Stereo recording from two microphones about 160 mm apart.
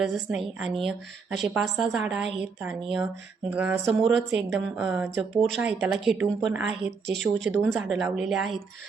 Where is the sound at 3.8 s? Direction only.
Centre (ahead or behind).